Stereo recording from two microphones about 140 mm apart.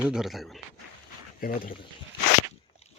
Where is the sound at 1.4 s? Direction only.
80° left.